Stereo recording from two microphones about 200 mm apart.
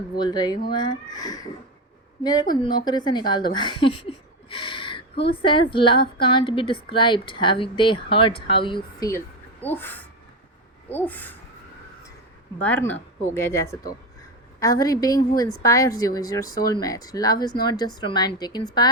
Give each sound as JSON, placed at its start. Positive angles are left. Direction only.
{"t": 0.2, "sound": "a woman's voice", "side_deg": 20}
{"t": 12.6, "sound": "a woman's voice", "side_deg": 10}